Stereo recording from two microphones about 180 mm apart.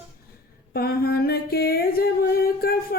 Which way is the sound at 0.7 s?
60° left (ahead or behind).